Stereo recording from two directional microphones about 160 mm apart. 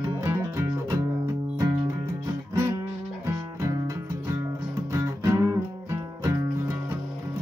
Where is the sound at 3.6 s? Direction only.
20° right (ahead or behind).